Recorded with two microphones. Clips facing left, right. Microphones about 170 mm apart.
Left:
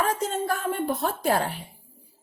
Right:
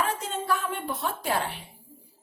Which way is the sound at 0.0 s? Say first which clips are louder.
Left 4 dB; 45° left (ahead or behind).